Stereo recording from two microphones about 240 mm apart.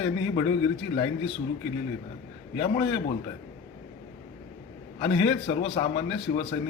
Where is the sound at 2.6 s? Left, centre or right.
Left.